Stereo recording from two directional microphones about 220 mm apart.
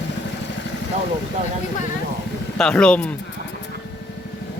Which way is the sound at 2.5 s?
5° left (ahead or behind).